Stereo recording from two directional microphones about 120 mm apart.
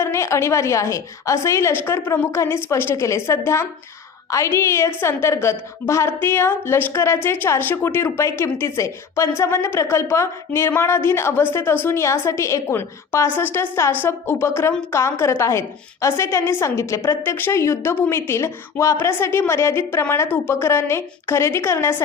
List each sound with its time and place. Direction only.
0.0 s a woman's voice: 25° left (ahead or behind)